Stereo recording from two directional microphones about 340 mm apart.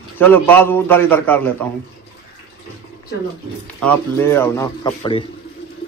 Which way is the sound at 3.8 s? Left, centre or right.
Centre.